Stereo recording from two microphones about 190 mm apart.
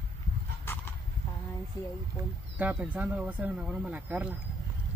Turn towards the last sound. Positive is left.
turn(degrees=-5)  # may be behind; listen again after turning